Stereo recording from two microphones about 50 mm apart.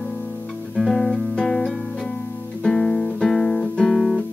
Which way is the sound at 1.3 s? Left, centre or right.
Centre.